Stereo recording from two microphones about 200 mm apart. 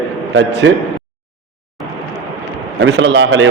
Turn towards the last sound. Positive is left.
turn(degrees=-65)  # may be behind; listen again after turning